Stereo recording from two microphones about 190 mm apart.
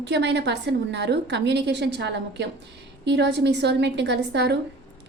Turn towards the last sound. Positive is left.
turn(degrees=-60)  # may be behind; listen again after turning